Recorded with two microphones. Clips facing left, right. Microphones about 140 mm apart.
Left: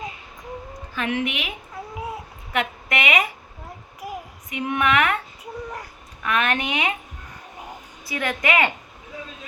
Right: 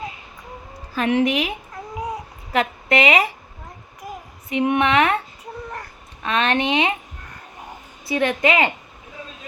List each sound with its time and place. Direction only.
0.9 s a woman's voice: 35° right (ahead or behind)
1.7 s babbling: 5° left (ahead or behind)
2.5 s a woman's voice: 30° right (ahead or behind)
4.0 s child singing: 10° left (ahead or behind)
4.4 s speech: 25° right (ahead or behind)
5.4 s child singing: 10° left (ahead or behind)
6.2 s speech: 30° right (ahead or behind)
8.0 s speech: 30° right (ahead or behind)